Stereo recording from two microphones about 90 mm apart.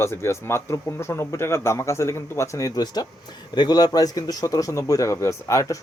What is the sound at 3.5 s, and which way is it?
Speech, 50° left (ahead or behind).